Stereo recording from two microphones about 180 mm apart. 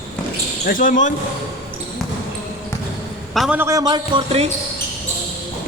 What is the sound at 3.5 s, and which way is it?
Speech, 15° right (ahead or behind).